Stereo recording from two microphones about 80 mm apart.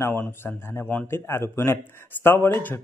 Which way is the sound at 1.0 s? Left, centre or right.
Left.